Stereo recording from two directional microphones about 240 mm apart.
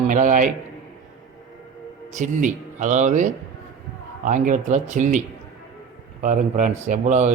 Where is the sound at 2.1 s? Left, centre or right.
Right.